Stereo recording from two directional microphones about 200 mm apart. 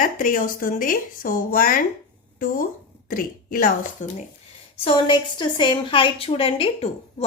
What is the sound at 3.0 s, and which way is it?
A woman's voice, 45° left (ahead or behind).